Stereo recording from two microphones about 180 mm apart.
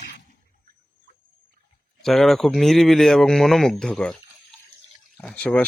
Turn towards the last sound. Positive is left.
turn(degrees=5)  # may be behind; listen again after turning